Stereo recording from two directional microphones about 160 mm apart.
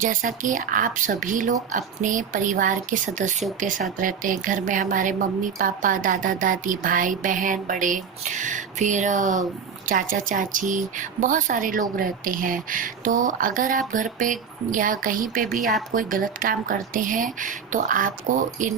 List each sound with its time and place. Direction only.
0.0 s a woman's voice: 55° right (ahead or behind)